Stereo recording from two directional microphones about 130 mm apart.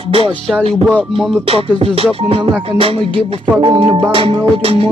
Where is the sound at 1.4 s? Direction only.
45° right (ahead or behind).